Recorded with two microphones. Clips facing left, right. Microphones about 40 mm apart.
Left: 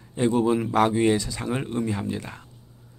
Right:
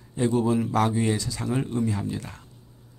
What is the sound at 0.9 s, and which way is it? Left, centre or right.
Speech, left.